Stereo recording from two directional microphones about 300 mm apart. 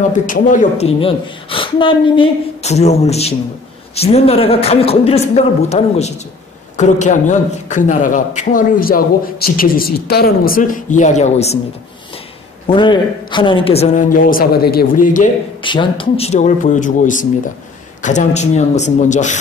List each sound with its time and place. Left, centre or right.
0.1 s a man's voice: left
12.6 s a man's voice: centre